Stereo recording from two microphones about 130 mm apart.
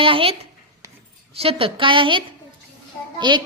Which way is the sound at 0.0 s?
45° right (ahead or behind).